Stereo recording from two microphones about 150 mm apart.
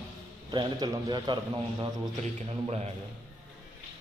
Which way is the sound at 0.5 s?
25° right (ahead or behind).